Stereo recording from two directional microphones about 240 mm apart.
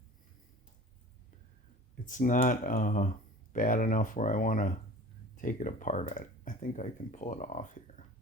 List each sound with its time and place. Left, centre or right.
2.0 s speech: left